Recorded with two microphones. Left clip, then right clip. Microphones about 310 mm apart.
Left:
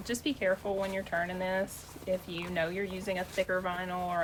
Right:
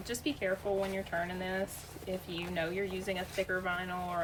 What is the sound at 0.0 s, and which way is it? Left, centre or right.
Speech, left.